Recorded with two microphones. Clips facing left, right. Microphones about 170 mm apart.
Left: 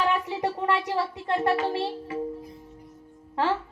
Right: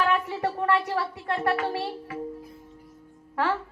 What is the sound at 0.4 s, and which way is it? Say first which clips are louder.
Speech: right 1 dB; 20° left (ahead or behind).